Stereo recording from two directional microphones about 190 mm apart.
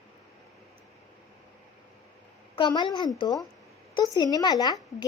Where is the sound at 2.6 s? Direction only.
25° left (ahead or behind).